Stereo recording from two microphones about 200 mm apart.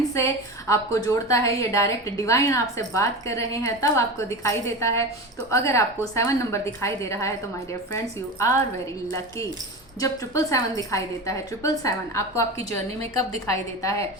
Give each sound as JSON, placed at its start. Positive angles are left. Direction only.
{"t": 0.1, "sound": "a woman's voice", "side_deg": 15}
{"t": 10.0, "sound": "a woman's voice", "side_deg": 15}